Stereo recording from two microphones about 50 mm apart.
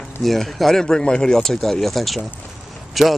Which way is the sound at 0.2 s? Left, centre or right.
Centre.